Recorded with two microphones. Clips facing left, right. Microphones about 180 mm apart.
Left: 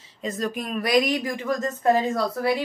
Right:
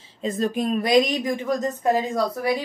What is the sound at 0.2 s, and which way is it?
Speech, 30° right (ahead or behind).